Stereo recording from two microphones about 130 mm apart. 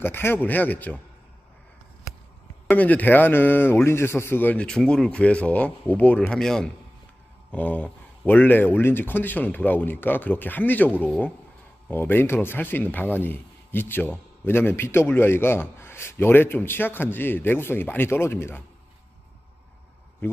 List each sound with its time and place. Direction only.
0.0 s speech: 15° left (ahead or behind)
2.6 s speech: 10° left (ahead or behind)
20.2 s a man's voice: 15° left (ahead or behind)